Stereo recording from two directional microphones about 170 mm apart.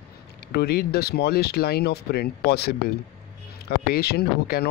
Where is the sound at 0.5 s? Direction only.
70° left (ahead or behind).